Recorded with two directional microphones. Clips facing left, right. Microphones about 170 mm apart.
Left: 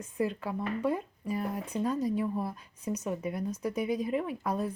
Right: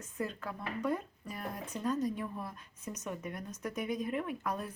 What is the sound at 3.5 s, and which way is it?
Speech, 10° left (ahead or behind).